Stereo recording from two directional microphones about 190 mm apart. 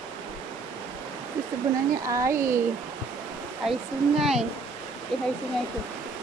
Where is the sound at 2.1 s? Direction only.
15° right (ahead or behind).